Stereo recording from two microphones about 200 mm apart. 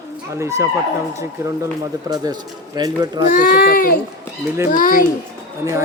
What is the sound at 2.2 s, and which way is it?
Speech, 20° right (ahead or behind).